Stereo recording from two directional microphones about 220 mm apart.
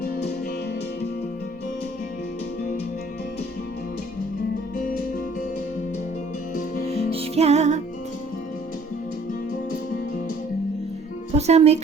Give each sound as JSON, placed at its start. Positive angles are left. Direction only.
{"t": 0.0, "sound": "music", "side_deg": 50}
{"t": 7.1, "sound": "music", "side_deg": -25}
{"t": 11.3, "sound": "music", "side_deg": -30}